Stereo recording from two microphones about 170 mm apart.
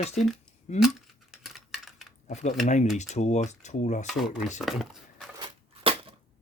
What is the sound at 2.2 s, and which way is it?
Speech, 45° left (ahead or behind).